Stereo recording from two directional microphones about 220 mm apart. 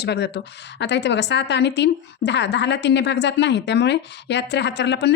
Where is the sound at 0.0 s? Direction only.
50° left (ahead or behind).